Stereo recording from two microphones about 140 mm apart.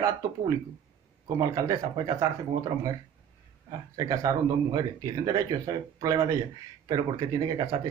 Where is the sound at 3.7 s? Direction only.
30° right (ahead or behind).